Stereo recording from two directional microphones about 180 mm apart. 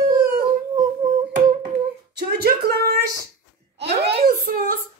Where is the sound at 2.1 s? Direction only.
60° right (ahead or behind).